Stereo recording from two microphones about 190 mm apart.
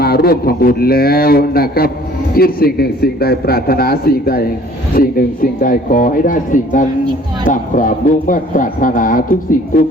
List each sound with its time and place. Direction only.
0.0 s a man's voice: 55° left (ahead or behind)